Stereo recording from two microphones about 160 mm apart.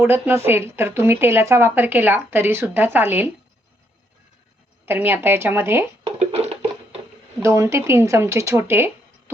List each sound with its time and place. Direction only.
0.0 s speech: 15° right (ahead or behind)
4.9 s speech: 10° right (ahead or behind)
6.1 s a sound: 40° right (ahead or behind)
7.4 s speech: 20° right (ahead or behind)